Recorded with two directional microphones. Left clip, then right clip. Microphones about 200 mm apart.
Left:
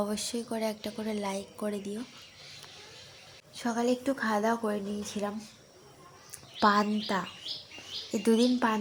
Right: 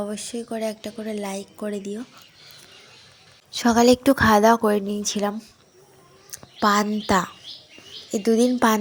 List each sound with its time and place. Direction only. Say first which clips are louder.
0.0 s a woman's voice: right 3 dB; 10° right (ahead or behind)
3.5 s a woman's voice: right 13 dB; 35° right (ahead or behind)
6.6 s a woman's voice: right 5 dB; 15° right (ahead or behind)
8.1 s a woman's voice: right 7 dB; 10° right (ahead or behind)
8.5 s speech: right 9 dB; 25° right (ahead or behind)